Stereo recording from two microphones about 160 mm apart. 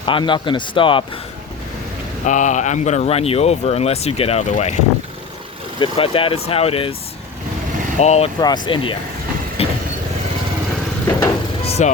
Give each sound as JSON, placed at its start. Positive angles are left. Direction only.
{"t": 0.0, "sound": "speech", "side_deg": 30}
{"t": 2.2, "sound": "speech", "side_deg": 50}
{"t": 5.8, "sound": "speech", "side_deg": 35}
{"t": 7.9, "sound": "speech", "side_deg": 45}
{"t": 8.4, "sound": "speech", "side_deg": 25}
{"t": 9.6, "sound": "vehicle", "side_deg": 40}
{"t": 11.6, "sound": "vehicle", "side_deg": 40}